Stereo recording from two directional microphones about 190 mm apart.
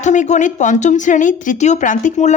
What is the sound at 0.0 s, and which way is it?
Speech, 40° left (ahead or behind).